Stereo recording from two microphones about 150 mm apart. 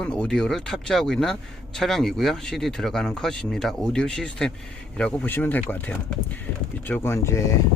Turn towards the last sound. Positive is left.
turn(degrees=20)  # may be behind; listen again after turning